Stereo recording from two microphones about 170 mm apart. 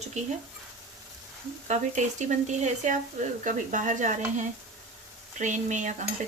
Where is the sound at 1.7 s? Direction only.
45° right (ahead or behind).